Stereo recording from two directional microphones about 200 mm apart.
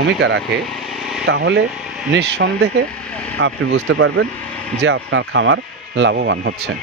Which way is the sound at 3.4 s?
75° right (ahead or behind).